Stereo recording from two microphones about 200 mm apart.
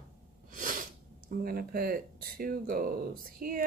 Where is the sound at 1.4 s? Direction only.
45° right (ahead or behind).